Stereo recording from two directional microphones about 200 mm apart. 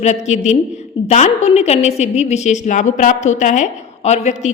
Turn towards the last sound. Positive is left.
turn(degrees=35)  # may be behind; listen again after turning